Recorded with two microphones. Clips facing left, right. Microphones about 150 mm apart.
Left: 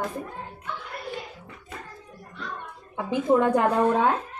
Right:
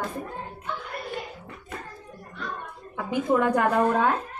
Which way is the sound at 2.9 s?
25° left (ahead or behind).